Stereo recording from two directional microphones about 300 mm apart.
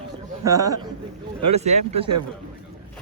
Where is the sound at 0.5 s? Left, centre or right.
Right.